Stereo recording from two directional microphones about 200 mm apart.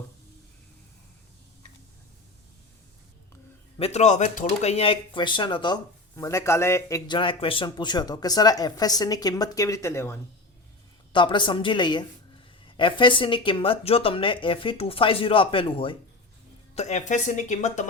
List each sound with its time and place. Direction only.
3.8 s speech: 30° left (ahead or behind); by 10.2 s 10° left (ahead or behind)
11.1 s speech: 25° left (ahead or behind)